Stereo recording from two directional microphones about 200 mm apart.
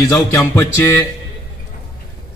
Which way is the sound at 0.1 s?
15° left (ahead or behind).